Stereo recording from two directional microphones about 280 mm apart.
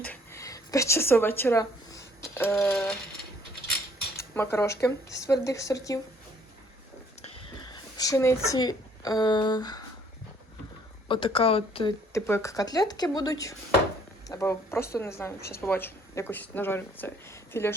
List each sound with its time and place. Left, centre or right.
0.0 s a sound: centre
4.4 s speech: centre
7.6 s speech: centre
11.1 s speech: centre
15.4 s a woman's voice: left
15.6 s speech: centre